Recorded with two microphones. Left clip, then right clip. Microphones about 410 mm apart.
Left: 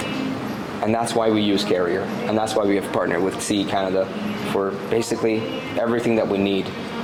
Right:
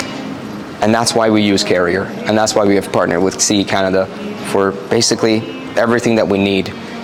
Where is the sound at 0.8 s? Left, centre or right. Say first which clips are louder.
Right 7 dB; right.